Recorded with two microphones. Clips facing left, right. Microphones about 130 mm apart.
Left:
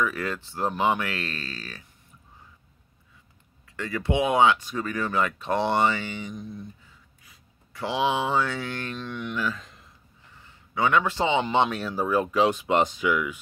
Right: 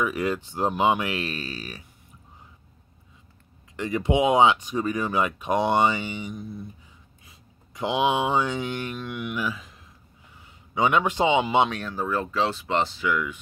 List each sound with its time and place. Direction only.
0.0 s speech: 15° right (ahead or behind)
3.7 s speech: 20° right (ahead or behind)
6.3 s speech: 5° right (ahead or behind)
7.2 s a man's voice: 20° right (ahead or behind)
11.7 s speech: 5° left (ahead or behind)